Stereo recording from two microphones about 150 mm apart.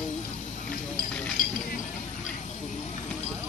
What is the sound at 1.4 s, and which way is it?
Chink, 70° left (ahead or behind).